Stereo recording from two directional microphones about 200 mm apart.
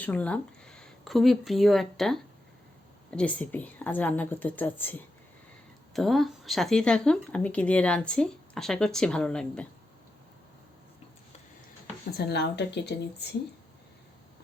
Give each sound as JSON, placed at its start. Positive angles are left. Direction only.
{"t": 0.0, "sound": "a woman's voice", "side_deg": 5}
{"t": 12.1, "sound": "speech", "side_deg": 55}